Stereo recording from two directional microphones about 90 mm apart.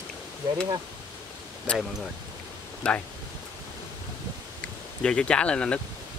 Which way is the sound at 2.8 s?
10° left (ahead or behind).